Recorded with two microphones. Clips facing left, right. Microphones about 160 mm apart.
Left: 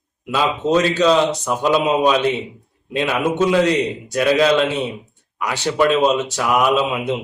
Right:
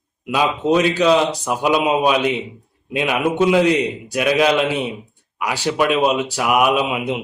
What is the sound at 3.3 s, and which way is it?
A man's voice, 15° right (ahead or behind).